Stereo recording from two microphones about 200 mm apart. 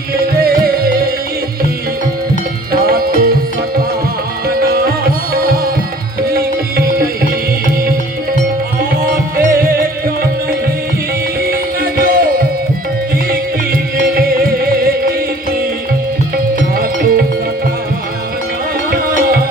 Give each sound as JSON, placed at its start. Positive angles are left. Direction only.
{"t": 0.4, "sound": "music", "side_deg": -50}
{"t": 2.8, "sound": "music", "side_deg": -50}
{"t": 4.4, "sound": "music", "side_deg": -50}
{"t": 6.2, "sound": "tabla", "side_deg": -50}
{"t": 8.8, "sound": "music", "side_deg": -45}
{"t": 11.4, "sound": "music", "side_deg": -45}
{"t": 14.1, "sound": "music", "side_deg": -45}
{"t": 16.7, "sound": "music", "side_deg": -45}